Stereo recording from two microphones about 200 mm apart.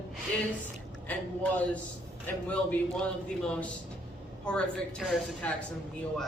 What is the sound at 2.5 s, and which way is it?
Speech, 5° left (ahead or behind).